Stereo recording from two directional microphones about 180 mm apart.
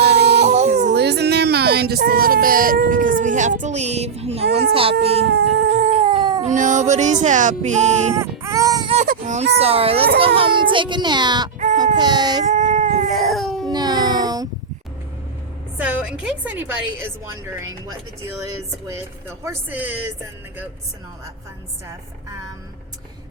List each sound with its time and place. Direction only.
0.0 s a sound: 65° right (ahead or behind)
0.4 s a sound: 40° right (ahead or behind)
0.9 s speech: 65° right (ahead or behind); by 4.9 s 30° right (ahead or behind)
5.2 s cat: 70° right (ahead or behind)
5.8 s cat: 35° right (ahead or behind)
6.5 s speech: 45° right (ahead or behind)
8.1 s baby cry: 15° right (ahead or behind)
9.0 s a sound: 40° right (ahead or behind)
9.6 s a child's voice: 35° right (ahead or behind)
12.5 s baby cry: 45° right (ahead or behind)
13.1 s baby cry: centre (ahead or behind)
13.7 s a sound: 20° right (ahead or behind)
15.8 s a woman's voice: 10° right (ahead or behind)
19.5 s a woman's voice: 10° right (ahead or behind)